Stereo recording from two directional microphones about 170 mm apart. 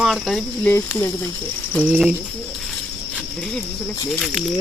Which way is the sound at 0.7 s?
10° left (ahead or behind).